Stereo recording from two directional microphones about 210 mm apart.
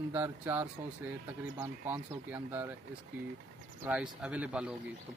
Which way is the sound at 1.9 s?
10° right (ahead or behind).